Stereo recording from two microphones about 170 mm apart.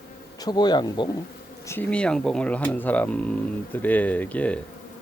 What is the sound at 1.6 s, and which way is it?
Speech, 10° left (ahead or behind).